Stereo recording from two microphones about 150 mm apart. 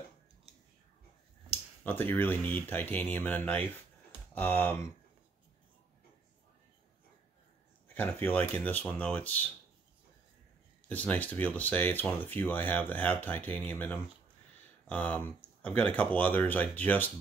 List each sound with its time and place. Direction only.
1.9 s speech: 15° left (ahead or behind)
7.9 s speech: 10° left (ahead or behind)
10.9 s speech: 10° left (ahead or behind)